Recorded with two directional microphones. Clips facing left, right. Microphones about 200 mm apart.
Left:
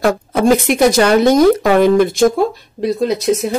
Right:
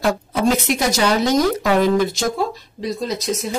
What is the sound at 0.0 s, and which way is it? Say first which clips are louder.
Speech: left 5 dB; 50° left (ahead or behind).